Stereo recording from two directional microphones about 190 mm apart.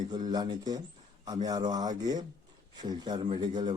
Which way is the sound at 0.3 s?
20° right (ahead or behind).